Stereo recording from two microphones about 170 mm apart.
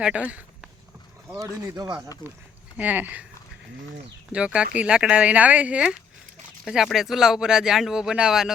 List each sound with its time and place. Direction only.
0.0 s speech: 5° right (ahead or behind)
1.3 s speech: 20° right (ahead or behind)
2.7 s speech: 10° right (ahead or behind)
4.3 s speech: 5° right (ahead or behind)